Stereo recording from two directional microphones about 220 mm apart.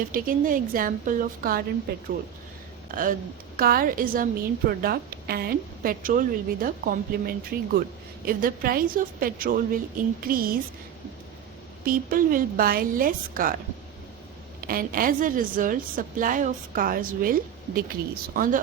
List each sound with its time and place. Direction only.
0.1 s a woman's voice: 40° right (ahead or behind)
2.9 s a woman's voice: 40° right (ahead or behind)
11.9 s a woman's voice: 40° right (ahead or behind)
14.6 s a woman's voice: 40° right (ahead or behind)